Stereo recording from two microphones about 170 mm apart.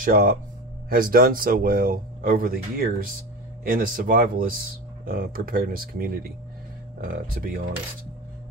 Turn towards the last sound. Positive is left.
turn(degrees=-55)  # may be behind; listen again after turning